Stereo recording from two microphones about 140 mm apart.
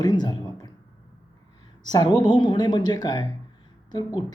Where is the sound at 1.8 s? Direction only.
30° left (ahead or behind).